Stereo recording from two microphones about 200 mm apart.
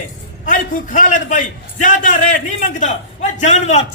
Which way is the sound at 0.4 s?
40° left (ahead or behind).